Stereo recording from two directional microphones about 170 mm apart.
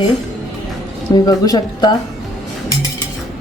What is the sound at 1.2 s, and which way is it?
Speech, 20° left (ahead or behind).